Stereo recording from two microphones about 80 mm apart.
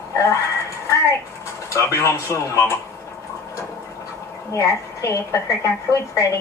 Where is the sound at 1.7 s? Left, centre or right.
Left.